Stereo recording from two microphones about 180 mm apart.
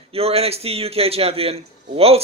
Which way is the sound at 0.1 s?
35° right (ahead or behind).